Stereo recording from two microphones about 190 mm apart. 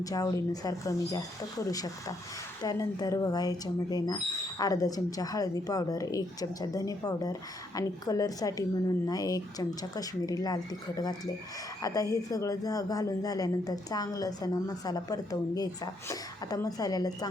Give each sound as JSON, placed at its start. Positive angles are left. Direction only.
{"t": 0.0, "sound": "speech", "side_deg": 20}